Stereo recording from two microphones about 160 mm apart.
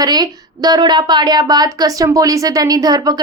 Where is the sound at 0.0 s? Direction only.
25° right (ahead or behind).